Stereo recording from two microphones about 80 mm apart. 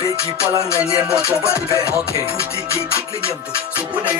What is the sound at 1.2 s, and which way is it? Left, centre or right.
Music, left.